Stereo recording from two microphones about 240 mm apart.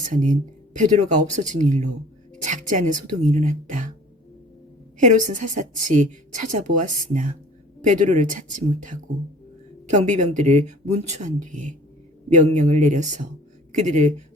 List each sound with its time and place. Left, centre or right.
0.0 s a woman's voice: right
4.9 s a woman's voice: right